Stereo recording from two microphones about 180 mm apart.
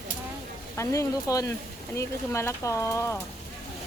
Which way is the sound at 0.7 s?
20° left (ahead or behind).